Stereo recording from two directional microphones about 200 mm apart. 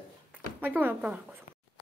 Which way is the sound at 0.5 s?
10° right (ahead or behind).